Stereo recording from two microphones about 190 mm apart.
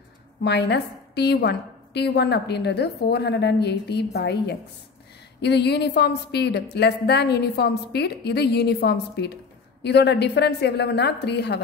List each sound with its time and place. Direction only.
0.4 s a woman's voice: 65° left (ahead or behind)